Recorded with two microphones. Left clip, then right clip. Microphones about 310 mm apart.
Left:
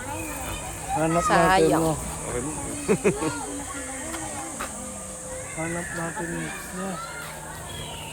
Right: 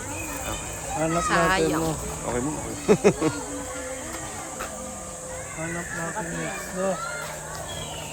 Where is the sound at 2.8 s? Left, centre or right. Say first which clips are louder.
Right 4 dB; right.